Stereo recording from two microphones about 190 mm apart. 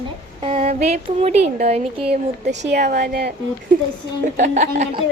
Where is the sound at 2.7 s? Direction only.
55° right (ahead or behind).